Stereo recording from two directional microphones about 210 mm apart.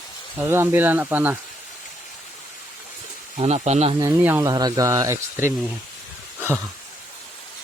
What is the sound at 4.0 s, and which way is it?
Speech, 10° right (ahead or behind).